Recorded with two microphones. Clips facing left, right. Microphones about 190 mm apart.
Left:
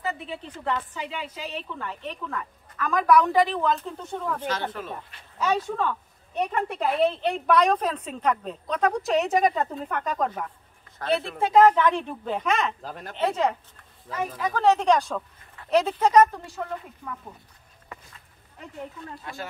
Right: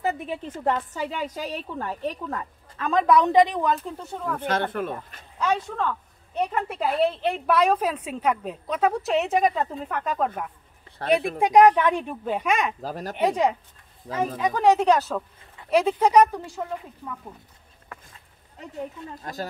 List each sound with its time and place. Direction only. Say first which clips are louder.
0.0 s a woman's voice: right 4 dB; 50° right (ahead or behind); by 4.4 s 5° right (ahead or behind)
4.4 s speech: right 4 dB; 55° right (ahead or behind)
5.4 s a woman's voice: even; 5° left (ahead or behind)
12.8 s a woman's voice: right 6 dB; 40° right (ahead or behind)
13.1 s speech: right 2 dB; 15° right (ahead or behind)
19.3 s a woman's voice: right 5 dB; 40° right (ahead or behind)